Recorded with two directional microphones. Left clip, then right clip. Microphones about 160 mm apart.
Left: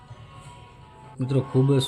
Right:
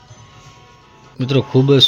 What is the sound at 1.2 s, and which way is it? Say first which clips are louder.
Speech: right 9 dB; 25° right (ahead or behind).